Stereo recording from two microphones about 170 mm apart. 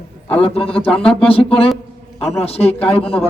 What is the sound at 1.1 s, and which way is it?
Speech, 35° left (ahead or behind).